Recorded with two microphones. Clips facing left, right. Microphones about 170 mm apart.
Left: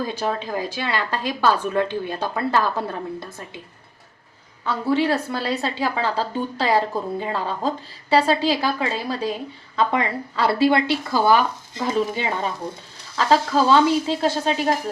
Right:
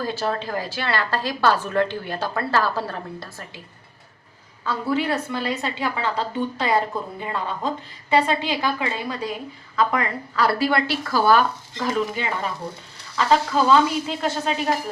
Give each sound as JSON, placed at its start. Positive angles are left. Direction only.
{"t": 0.0, "sound": "a woman's voice", "side_deg": 15}
{"t": 4.6, "sound": "a woman's voice", "side_deg": 30}